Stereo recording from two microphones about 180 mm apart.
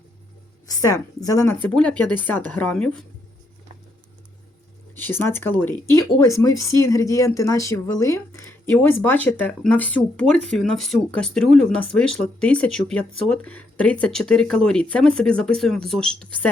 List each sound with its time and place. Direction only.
0.7 s a woman's voice: 20° left (ahead or behind)
1.6 s speech: 5° left (ahead or behind)
4.9 s speech: 10° left (ahead or behind)